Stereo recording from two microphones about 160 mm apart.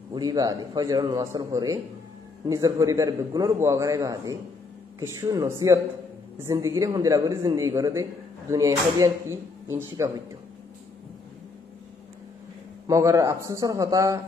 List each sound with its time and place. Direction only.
0.1 s a man's voice: 25° right (ahead or behind)
12.8 s a man's voice: 20° right (ahead or behind)